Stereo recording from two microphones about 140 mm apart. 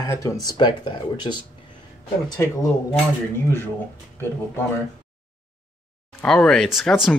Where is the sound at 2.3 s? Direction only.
15° left (ahead or behind).